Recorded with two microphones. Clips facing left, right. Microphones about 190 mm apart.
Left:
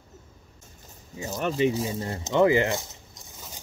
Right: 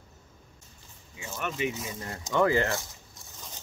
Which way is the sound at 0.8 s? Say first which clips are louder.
Left 8 dB; 40° left (ahead or behind).